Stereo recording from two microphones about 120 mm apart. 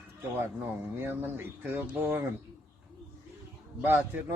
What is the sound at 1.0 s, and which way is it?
Speech, 15° right (ahead or behind).